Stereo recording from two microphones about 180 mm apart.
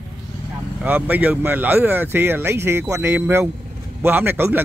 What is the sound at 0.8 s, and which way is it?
Speech, 10° right (ahead or behind).